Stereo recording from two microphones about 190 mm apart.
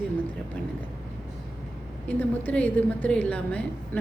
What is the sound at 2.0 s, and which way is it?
A woman's voice, 10° left (ahead or behind).